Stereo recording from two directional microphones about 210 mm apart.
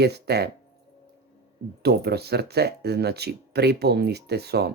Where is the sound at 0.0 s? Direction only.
50° right (ahead or behind).